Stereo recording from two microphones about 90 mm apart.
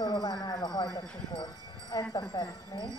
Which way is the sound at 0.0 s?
45° left (ahead or behind).